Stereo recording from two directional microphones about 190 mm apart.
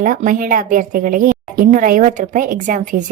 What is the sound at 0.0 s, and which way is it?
A woman's voice, 40° right (ahead or behind).